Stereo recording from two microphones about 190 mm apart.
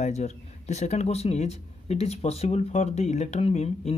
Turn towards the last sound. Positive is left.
turn(degrees=35)  # may be behind; listen again after turning